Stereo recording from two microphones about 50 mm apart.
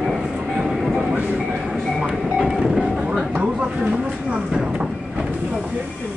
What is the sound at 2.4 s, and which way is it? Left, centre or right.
Vehicle, centre.